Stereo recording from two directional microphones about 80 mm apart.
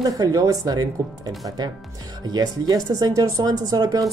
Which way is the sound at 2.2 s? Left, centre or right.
Right.